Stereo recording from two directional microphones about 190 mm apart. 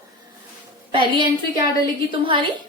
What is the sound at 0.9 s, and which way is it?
Speech, 25° right (ahead or behind).